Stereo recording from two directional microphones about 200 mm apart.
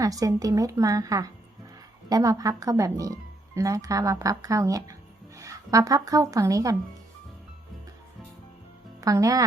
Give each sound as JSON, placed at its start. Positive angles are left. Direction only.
{"t": 0.0, "sound": "speech", "side_deg": -15}
{"t": 9.0, "sound": "a woman's voice", "side_deg": -15}